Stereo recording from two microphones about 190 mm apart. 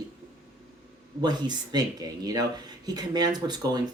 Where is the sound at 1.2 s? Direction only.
20° right (ahead or behind).